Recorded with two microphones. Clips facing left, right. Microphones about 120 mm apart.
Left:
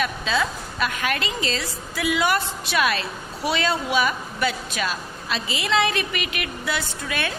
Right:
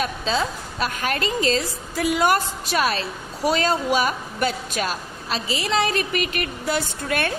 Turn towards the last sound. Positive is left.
turn(degrees=-50)  # may be behind; listen again after turning